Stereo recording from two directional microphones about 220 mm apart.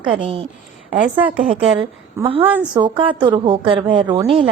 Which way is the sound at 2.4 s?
10° right (ahead or behind).